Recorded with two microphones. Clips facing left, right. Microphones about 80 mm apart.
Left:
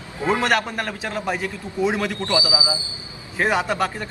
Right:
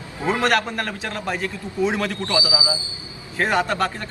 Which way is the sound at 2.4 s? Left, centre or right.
Left.